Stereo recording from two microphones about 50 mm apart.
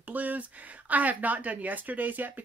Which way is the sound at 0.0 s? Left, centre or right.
Right.